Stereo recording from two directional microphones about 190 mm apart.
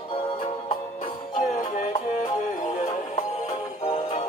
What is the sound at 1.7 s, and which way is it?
Music, 40° left (ahead or behind).